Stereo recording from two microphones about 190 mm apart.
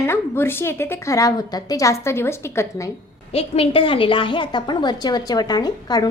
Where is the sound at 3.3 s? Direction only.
30° left (ahead or behind).